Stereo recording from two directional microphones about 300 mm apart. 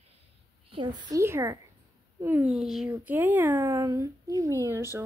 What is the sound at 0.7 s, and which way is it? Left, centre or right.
Speech, centre.